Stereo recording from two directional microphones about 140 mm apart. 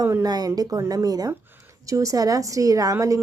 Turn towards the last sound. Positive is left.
turn(degrees=-25)  # may be behind; listen again after turning